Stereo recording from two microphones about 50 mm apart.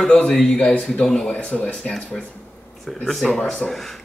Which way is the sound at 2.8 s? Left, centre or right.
Centre.